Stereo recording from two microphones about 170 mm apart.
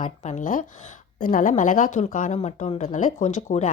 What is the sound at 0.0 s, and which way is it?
A woman's voice, 45° left (ahead or behind).